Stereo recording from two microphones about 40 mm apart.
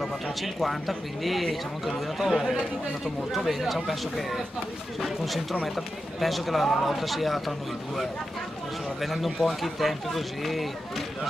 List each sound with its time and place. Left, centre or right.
0.0 s speech: centre